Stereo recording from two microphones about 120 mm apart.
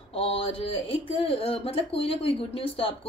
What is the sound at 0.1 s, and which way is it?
Speech, 50° left (ahead or behind).